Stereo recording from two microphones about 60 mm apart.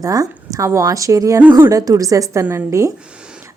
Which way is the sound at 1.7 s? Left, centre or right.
Right.